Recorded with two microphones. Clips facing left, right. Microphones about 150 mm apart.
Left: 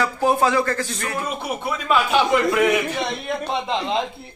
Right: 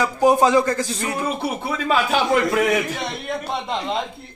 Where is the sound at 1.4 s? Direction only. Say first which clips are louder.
Right 2 dB; 35° right (ahead or behind).